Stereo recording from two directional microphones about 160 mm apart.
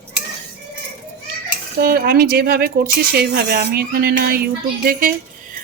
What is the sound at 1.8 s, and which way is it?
Speech, 70° right (ahead or behind).